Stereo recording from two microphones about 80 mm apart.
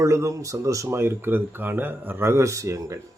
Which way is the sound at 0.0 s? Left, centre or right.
Right.